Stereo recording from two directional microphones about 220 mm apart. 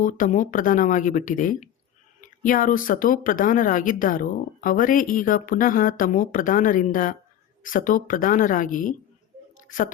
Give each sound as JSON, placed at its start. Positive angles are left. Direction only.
{"t": 0.0, "sound": "a woman's voice", "side_deg": 35}